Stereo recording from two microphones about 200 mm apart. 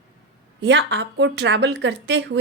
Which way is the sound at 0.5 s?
60° right (ahead or behind).